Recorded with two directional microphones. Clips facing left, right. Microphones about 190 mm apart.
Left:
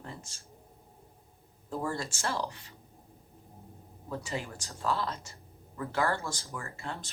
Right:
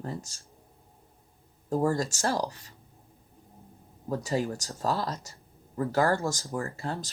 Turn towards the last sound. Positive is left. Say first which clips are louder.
# right 7 dB
turn(degrees=-35)  # may be behind; listen again after turning